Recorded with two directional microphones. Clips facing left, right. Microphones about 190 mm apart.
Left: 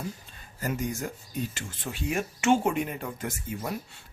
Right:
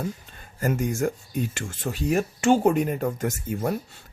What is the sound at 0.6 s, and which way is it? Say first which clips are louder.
Speech: right 7 dB; 50° right (ahead or behind).